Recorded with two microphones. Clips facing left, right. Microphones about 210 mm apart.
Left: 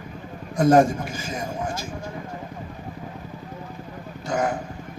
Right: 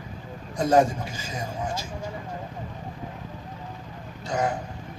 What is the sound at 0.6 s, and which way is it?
Speech, 45° left (ahead or behind).